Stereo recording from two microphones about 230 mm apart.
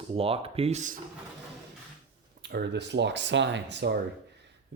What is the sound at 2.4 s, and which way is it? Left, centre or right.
Speech, right.